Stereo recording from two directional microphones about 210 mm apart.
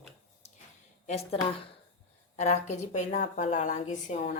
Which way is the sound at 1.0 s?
30° left (ahead or behind).